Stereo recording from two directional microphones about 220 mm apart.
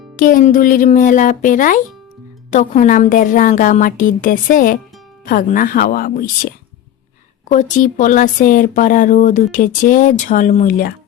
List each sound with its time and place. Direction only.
0.2 s speech: 40° left (ahead or behind)